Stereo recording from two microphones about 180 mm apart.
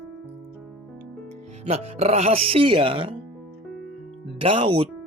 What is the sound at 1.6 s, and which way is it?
Speech, 35° right (ahead or behind).